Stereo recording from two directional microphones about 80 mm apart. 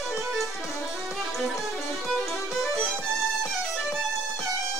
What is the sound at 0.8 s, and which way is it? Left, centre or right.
Music, centre.